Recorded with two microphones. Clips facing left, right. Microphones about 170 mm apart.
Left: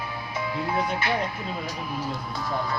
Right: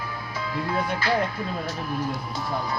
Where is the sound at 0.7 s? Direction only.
20° left (ahead or behind).